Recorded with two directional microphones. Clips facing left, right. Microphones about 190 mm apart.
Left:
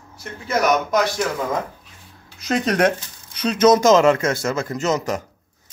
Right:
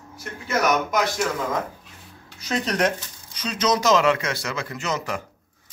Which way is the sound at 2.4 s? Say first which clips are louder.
Left 5 dB; 55° left (ahead or behind).